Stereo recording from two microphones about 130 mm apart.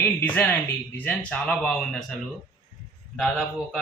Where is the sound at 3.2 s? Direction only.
5° left (ahead or behind).